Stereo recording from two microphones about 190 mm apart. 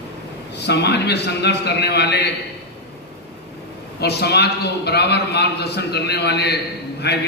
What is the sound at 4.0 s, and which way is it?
A man's voice, 60° left (ahead or behind).